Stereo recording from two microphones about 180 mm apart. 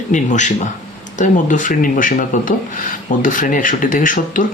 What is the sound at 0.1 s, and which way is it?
Speech, 45° left (ahead or behind).